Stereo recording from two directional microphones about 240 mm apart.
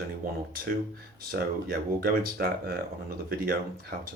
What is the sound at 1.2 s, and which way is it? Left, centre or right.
Speech, right.